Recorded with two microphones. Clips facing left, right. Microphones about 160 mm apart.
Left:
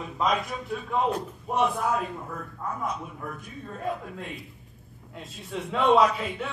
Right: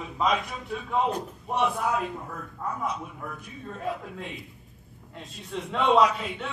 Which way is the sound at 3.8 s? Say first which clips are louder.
Left 1 dB; centre (ahead or behind).